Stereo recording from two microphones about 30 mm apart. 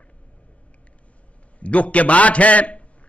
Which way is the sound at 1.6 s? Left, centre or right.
Left.